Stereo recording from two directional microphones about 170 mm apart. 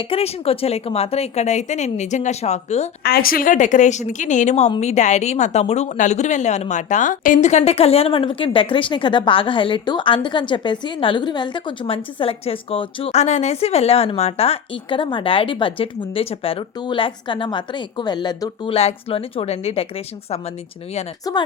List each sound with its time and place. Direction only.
0.0 s a woman's voice: 35° left (ahead or behind)
3.0 s a woman's voice: 60° left (ahead or behind); by 19.9 s 35° left (ahead or behind)
21.2 s speech: 20° left (ahead or behind)